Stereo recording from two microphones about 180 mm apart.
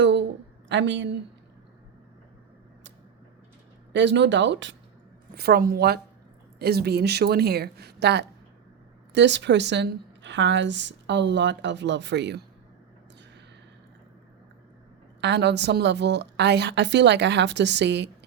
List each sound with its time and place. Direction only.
0.0 s a sound: 80° right
0.7 s speech: 85° right
3.9 s speech: 80° right
5.3 s a woman's voice: 60° right (ahead or behind)
15.2 s a woman's voice: 70° right (ahead or behind)